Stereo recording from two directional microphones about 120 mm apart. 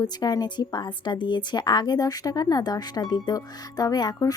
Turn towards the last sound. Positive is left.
turn(degrees=35)  # may be behind; listen again after turning